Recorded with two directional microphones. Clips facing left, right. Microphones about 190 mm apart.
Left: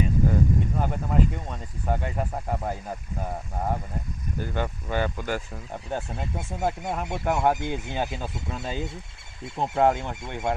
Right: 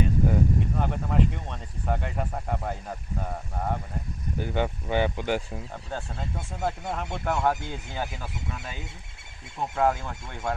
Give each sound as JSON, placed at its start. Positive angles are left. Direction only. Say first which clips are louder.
{"t": 0.0, "sound": "speech", "louder": "left 1 dB", "side_deg": 5}
{"t": 4.4, "sound": "speech", "louder": "right 2 dB", "side_deg": -15}
{"t": 5.9, "sound": "speech", "louder": "left 5 dB", "side_deg": 20}